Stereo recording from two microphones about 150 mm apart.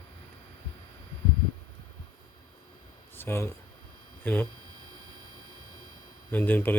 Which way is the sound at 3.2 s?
15° left (ahead or behind).